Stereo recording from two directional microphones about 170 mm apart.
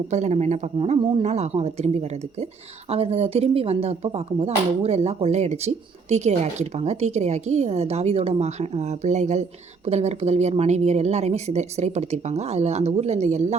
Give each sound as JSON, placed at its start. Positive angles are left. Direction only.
{"t": 0.1, "sound": "speech", "side_deg": -40}